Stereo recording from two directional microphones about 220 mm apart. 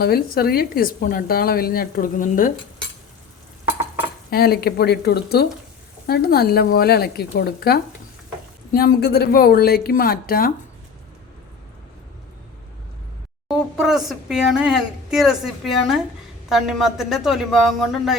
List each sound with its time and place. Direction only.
0.0 s a woman's voice: 45° left (ahead or behind)
4.3 s a woman's voice: 45° left (ahead or behind)
13.5 s speech: centre (ahead or behind)